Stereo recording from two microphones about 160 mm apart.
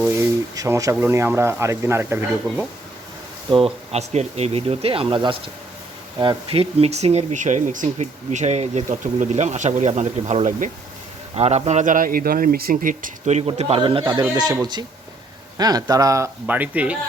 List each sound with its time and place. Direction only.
0.2 s speech: 20° right (ahead or behind)
3.5 s speech: 40° right (ahead or behind)
14.3 s speech: 25° right (ahead or behind); by 17.0 s 10° right (ahead or behind)